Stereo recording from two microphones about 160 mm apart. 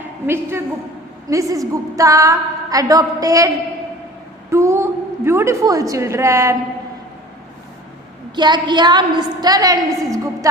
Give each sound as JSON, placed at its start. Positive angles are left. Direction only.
{"t": 1.3, "sound": "a woman's voice", "side_deg": -20}
{"t": 8.4, "sound": "a woman's voice", "side_deg": -30}